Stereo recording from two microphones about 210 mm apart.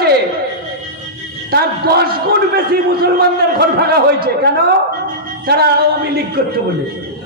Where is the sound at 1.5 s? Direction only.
50° right (ahead or behind).